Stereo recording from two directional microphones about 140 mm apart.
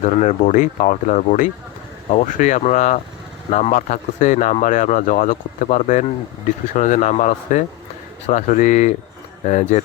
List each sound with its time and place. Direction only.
0.0 s speech: 55° left (ahead or behind)